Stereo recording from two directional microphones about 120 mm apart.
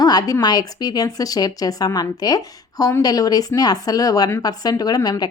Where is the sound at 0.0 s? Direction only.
35° left (ahead or behind).